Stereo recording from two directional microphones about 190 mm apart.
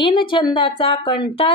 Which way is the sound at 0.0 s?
25° left (ahead or behind).